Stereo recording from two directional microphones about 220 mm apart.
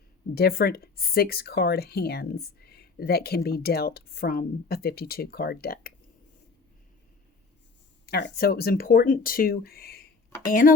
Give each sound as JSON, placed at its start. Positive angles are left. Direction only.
{"t": 0.3, "sound": "speech", "side_deg": 45}
{"t": 8.0, "sound": "speech", "side_deg": 45}